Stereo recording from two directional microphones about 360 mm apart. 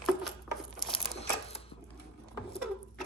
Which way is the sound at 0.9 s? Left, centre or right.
Centre.